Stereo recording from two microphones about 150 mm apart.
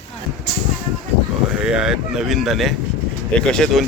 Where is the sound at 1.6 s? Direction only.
5° right (ahead or behind).